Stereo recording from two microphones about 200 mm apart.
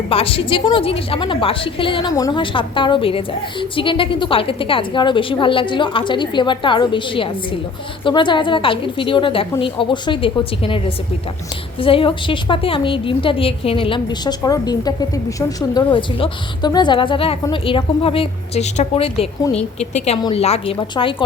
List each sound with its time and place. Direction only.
0.1 s a woman's voice: 30° left (ahead or behind)
20.1 s a woman's voice: 20° left (ahead or behind)